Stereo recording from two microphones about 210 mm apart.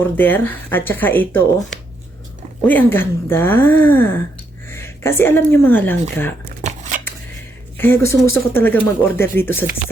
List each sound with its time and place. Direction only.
0.2 s a woman's voice: 10° left (ahead or behind)
6.6 s shuffling cards: 35° right (ahead or behind)
7.8 s speech: 10° left (ahead or behind)